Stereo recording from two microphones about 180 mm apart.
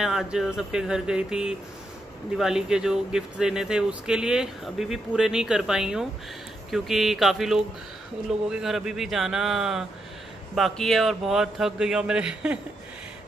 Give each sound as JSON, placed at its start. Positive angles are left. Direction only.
{"t": 0.0, "sound": "speech", "side_deg": 0}